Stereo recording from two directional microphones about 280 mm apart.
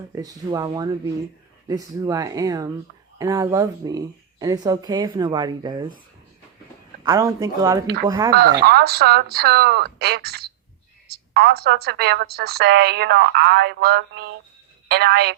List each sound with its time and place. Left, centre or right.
0.1 s speech: centre
7.0 s speech: centre
8.3 s a woman's voice: right